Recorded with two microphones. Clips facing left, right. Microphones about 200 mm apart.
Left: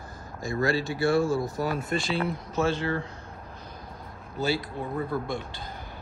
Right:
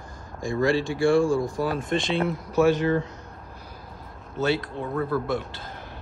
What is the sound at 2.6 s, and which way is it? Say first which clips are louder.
Speech: right 6 dB; 20° right (ahead or behind).